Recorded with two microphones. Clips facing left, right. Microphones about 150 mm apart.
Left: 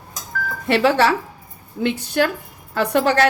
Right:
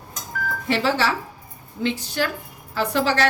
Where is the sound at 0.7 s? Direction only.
60° left (ahead or behind).